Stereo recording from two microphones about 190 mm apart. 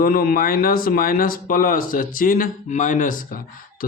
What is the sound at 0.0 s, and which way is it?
Speech, 50° left (ahead or behind).